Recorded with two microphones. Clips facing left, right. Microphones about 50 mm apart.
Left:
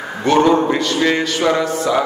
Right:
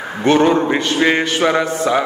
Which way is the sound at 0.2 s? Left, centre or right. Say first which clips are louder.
Even; right.